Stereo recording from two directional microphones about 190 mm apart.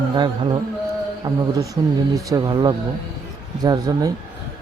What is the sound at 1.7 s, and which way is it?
A man's voice, 20° right (ahead or behind).